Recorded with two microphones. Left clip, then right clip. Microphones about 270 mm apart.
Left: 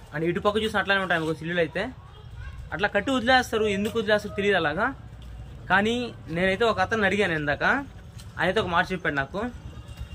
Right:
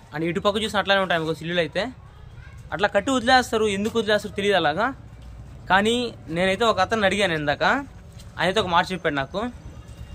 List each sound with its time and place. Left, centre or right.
0.1 s a man's voice: centre